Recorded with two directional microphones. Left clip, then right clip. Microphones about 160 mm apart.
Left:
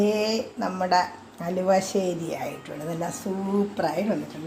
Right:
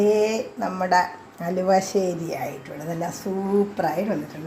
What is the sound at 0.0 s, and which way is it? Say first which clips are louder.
Speech: right 4 dB; centre (ahead or behind).